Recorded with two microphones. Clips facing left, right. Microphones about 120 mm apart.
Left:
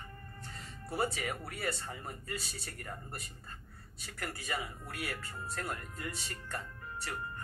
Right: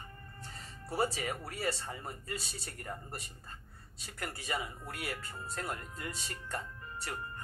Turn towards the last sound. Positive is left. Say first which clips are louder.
# even
turn(degrees=-25)  # may be behind; listen again after turning